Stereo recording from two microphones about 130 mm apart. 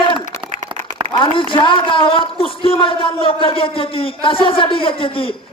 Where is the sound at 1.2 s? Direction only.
40° left (ahead or behind).